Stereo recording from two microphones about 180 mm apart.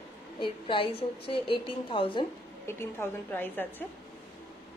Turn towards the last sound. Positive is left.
turn(degrees=10)  # may be behind; listen again after turning